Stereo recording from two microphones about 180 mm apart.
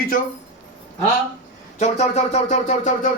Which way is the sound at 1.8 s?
35° left (ahead or behind).